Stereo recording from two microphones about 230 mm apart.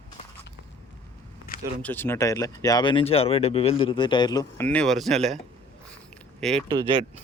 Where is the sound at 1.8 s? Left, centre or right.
Centre.